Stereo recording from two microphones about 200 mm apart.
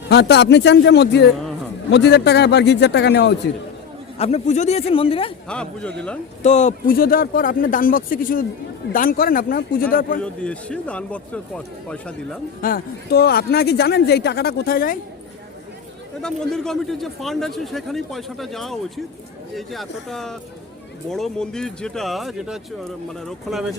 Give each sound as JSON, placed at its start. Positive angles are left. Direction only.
{"t": 0.1, "sound": "a man's voice", "side_deg": 55}
{"t": 4.2, "sound": "speech", "side_deg": 35}
{"t": 5.5, "sound": "a man's voice", "side_deg": 5}
{"t": 6.4, "sound": "speech", "side_deg": 35}
{"t": 10.4, "sound": "a man's voice", "side_deg": 5}
{"t": 12.6, "sound": "speech", "side_deg": 50}
{"t": 16.2, "sound": "a man's voice", "side_deg": 5}